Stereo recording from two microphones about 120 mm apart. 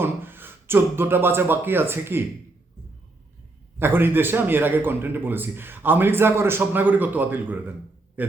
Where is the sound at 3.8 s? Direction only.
20° right (ahead or behind).